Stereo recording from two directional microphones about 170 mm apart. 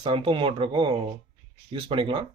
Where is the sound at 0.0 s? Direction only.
30° right (ahead or behind).